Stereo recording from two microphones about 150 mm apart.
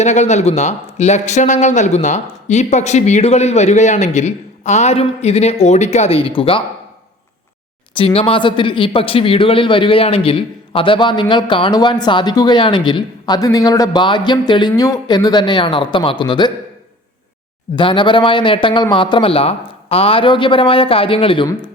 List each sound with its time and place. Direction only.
0.0 s speech: 50° left (ahead or behind)
7.9 s a man's voice: 40° left (ahead or behind)
17.7 s a man's voice: 30° left (ahead or behind)